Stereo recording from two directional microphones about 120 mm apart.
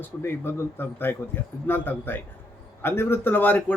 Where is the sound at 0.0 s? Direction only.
20° left (ahead or behind).